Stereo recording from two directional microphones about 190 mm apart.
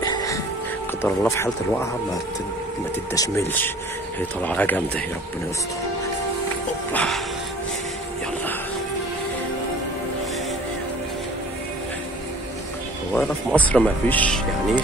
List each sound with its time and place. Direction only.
0.0 s music: 20° left (ahead or behind)
1.0 s speech: 10° left (ahead or behind)
3.2 s speech: 15° left (ahead or behind)
6.9 s music: 5° left (ahead or behind)
13.1 s speech: 5° left (ahead or behind)